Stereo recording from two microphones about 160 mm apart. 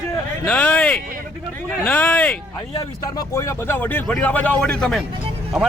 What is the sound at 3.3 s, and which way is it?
A man's voice, 15° left (ahead or behind).